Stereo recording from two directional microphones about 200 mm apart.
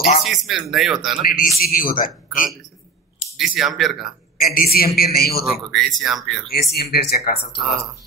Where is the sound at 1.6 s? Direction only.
45° left (ahead or behind).